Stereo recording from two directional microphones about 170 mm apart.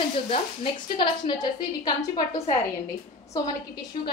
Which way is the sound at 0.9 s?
25° left (ahead or behind).